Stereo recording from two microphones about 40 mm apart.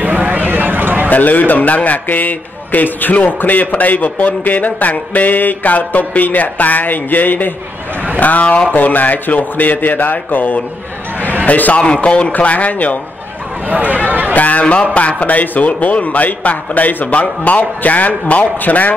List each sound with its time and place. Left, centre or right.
0.0 s a sound: right
1.1 s a man's voice: left
11.8 s a man's voice: left
13.7 s speech: right
14.3 s a man's voice: left